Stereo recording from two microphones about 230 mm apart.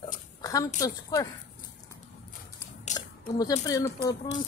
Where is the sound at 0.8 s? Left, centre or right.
Centre.